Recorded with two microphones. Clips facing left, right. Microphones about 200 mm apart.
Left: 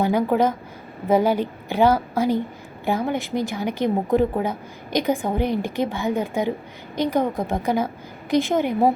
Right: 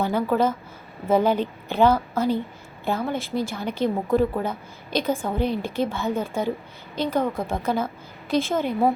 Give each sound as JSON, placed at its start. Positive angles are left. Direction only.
{"t": 0.0, "sound": "speech", "side_deg": 15}